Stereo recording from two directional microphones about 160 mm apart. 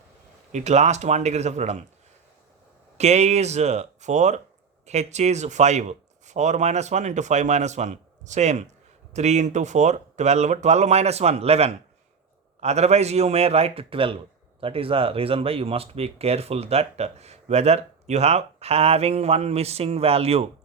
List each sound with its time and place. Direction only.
0.5 s speech: 45° right (ahead or behind)
3.0 s speech: 45° right (ahead or behind)